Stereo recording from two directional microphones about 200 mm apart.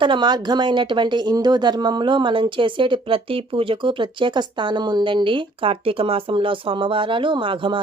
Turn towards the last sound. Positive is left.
turn(degrees=-25)  # may be behind; listen again after turning